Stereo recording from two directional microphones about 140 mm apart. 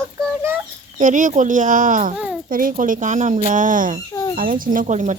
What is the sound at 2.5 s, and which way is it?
Speech, 80° right.